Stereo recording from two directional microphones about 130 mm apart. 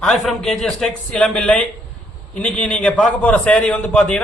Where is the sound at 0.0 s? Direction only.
Centre (ahead or behind).